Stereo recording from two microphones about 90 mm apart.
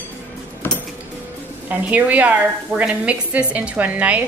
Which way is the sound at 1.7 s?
15° right (ahead or behind).